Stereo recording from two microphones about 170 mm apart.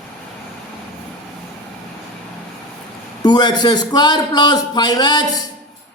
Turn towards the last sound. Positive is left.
turn(degrees=25)  # may be behind; listen again after turning